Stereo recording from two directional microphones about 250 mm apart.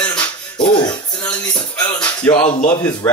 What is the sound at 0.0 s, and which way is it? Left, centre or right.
Music, centre.